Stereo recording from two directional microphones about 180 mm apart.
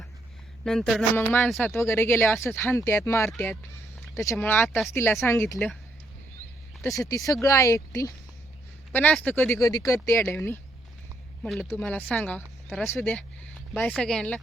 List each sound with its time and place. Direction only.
0.6 s speech: centre (ahead or behind)
1.7 s speech: 15° left (ahead or behind)
6.8 s speech: 20° left (ahead or behind)
11.7 s speech: 10° left (ahead or behind)